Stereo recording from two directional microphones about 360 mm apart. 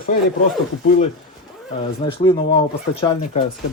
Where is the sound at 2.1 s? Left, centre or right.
Centre.